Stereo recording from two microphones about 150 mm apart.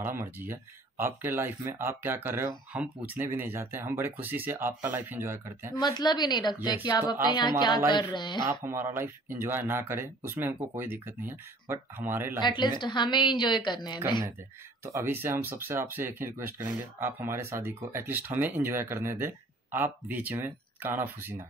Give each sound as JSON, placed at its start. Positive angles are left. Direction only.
{"t": 0.0, "sound": "speech", "side_deg": -15}
{"t": 5.8, "sound": "a woman's voice", "side_deg": 30}
{"t": 8.5, "sound": "speech", "side_deg": -15}
{"t": 12.4, "sound": "a woman's voice", "side_deg": 30}
{"t": 14.9, "sound": "speech", "side_deg": -20}